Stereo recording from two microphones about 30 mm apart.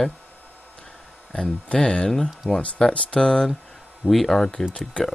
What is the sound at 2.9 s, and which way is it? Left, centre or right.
Speech, left.